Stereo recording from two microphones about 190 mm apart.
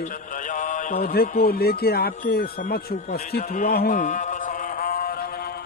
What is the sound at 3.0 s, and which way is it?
Speech, 40° left (ahead or behind).